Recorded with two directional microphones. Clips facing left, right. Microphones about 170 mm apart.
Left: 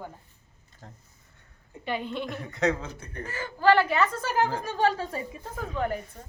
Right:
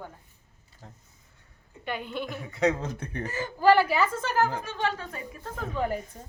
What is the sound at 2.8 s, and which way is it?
Speech, 45° right (ahead or behind).